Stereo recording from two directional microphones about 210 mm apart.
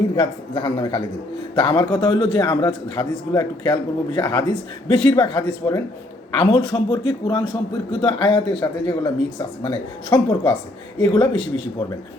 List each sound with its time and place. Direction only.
0.2 s a man's voice: 25° left (ahead or behind)